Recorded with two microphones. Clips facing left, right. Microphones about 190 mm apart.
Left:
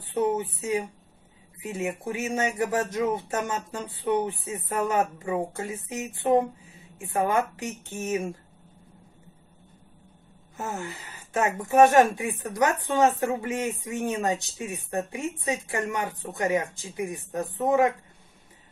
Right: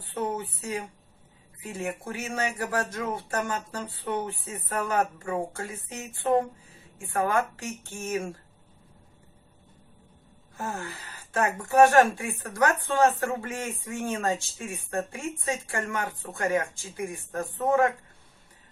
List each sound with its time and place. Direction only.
0.0 s speech: 20° left (ahead or behind)
1.6 s speech: 20° left (ahead or behind)
10.5 s speech: 20° left (ahead or behind)